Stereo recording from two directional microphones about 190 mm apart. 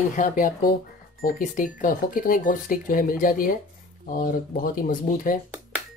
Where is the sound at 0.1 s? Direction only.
45° left (ahead or behind).